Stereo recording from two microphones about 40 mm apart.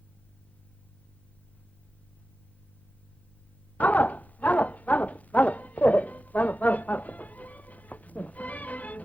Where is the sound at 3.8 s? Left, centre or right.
Left.